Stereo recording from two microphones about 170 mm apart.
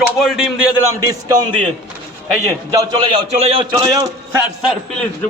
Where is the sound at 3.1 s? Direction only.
35° right (ahead or behind).